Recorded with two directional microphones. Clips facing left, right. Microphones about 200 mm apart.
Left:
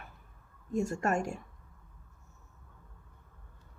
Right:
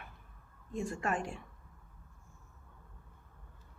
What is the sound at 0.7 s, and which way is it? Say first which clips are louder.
Speech: left 5 dB; 45° left (ahead or behind).